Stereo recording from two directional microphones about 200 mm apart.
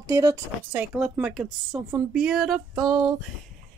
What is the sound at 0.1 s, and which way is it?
Speech, 15° right (ahead or behind).